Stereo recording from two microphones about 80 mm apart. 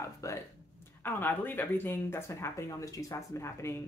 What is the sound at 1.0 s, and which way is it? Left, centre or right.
A woman's voice, left.